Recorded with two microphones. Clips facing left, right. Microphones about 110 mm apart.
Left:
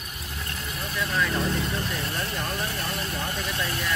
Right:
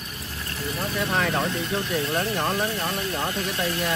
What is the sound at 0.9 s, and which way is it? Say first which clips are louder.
Vehicle: right 2 dB; 55° right (ahead or behind).